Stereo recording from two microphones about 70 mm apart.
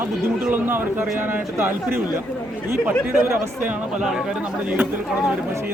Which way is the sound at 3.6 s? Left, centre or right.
Centre.